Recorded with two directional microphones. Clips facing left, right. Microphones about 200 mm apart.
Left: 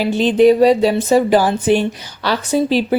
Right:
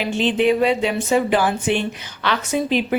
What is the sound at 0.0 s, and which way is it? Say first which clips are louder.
Speech: left 7 dB; 40° left (ahead or behind).